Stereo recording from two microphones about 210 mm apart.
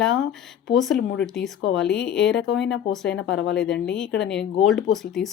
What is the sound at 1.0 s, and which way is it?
Speech, 60° left (ahead or behind).